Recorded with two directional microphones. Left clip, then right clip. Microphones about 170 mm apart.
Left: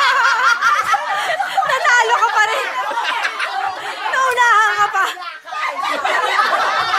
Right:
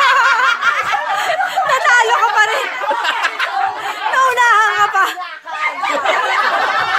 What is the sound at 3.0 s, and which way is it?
Chatter, 30° right (ahead or behind).